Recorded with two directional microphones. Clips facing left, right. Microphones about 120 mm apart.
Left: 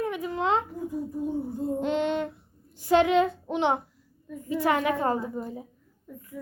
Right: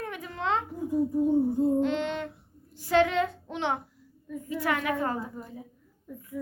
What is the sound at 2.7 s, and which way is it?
A woman's voice, 20° left (ahead or behind).